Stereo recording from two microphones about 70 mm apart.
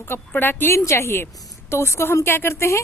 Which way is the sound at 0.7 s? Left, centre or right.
Left.